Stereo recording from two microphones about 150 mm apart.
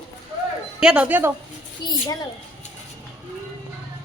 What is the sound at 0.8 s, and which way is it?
Speech, 5° right (ahead or behind).